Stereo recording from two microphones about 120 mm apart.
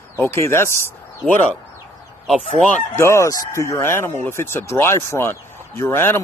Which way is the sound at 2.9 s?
25° left (ahead or behind).